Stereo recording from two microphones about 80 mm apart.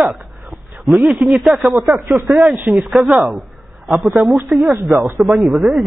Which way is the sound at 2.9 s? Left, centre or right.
Centre.